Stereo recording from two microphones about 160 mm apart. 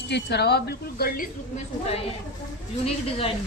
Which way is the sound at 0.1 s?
90° left.